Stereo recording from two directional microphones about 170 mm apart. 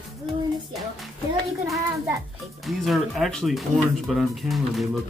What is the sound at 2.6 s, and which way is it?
Speech, centre (ahead or behind).